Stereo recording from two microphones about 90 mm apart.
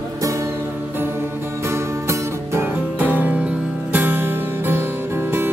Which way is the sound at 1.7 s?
30° right (ahead or behind).